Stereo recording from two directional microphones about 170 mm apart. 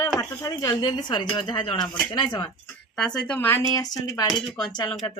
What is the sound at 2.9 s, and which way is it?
Speech, 5° left (ahead or behind).